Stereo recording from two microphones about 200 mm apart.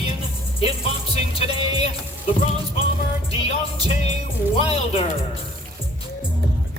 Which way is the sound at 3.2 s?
30° left (ahead or behind).